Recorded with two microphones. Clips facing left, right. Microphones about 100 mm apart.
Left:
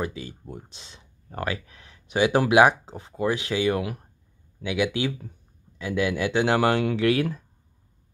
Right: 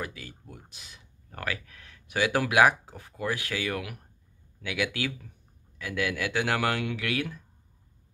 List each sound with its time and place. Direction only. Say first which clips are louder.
0.0 s speech: left 7 dB; 25° left (ahead or behind)